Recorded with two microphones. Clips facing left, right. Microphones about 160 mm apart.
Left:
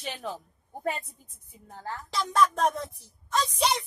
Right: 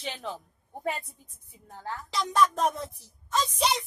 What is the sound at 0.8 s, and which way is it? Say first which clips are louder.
Speech: left 1 dB; centre (ahead or behind).